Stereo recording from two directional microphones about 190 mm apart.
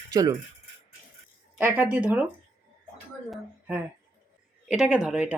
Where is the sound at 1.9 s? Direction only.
10° right (ahead or behind).